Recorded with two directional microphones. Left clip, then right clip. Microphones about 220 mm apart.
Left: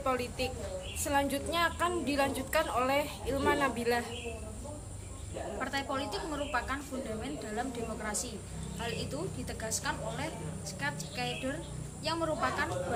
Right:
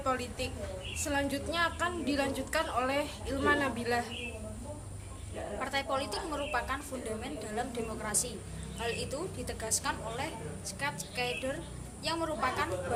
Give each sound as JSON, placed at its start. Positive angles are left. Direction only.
{"t": 0.0, "sound": "a woman's voice", "side_deg": 15}
{"t": 5.5, "sound": "a woman's voice", "side_deg": -15}
{"t": 8.0, "sound": "a woman's voice", "side_deg": -15}